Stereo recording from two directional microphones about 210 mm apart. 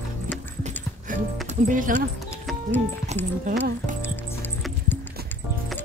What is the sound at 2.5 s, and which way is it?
Music, 10° left (ahead or behind).